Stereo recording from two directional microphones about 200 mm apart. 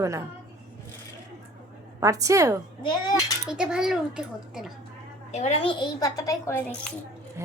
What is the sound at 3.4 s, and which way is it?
A child's voice, 5° right (ahead or behind).